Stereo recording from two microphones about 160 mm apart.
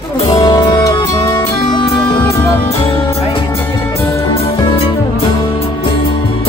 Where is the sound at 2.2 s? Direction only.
15° left (ahead or behind).